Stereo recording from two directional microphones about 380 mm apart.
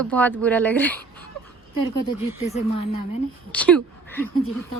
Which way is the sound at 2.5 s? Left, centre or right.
Centre.